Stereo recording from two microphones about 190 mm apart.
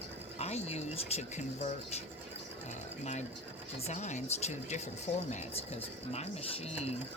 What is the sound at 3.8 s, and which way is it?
Speech, 35° left (ahead or behind).